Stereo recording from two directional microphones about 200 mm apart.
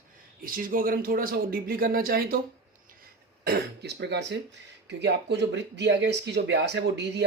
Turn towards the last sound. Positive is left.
turn(degrees=-60)  # may be behind; listen again after turning